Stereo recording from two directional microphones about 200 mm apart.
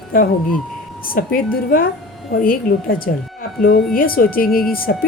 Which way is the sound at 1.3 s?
45° left (ahead or behind).